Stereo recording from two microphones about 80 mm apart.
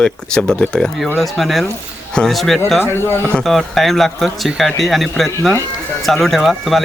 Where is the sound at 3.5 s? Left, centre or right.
Centre.